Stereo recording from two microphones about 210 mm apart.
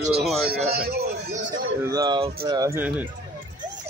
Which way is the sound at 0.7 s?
45° right (ahead or behind).